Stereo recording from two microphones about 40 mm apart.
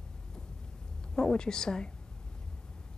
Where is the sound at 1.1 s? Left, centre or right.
Left.